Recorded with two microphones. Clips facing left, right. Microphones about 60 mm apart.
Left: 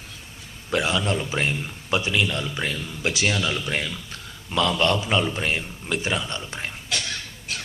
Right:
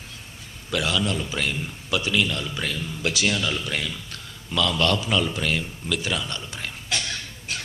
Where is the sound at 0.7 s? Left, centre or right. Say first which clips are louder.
Left 2 dB; left.